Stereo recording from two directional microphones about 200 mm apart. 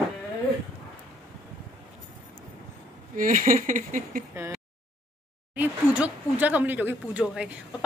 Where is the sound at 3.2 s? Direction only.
40° right (ahead or behind).